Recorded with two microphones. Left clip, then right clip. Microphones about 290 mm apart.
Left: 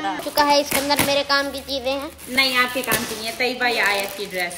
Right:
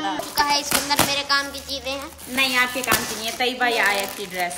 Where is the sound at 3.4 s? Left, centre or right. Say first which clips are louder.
Even; right.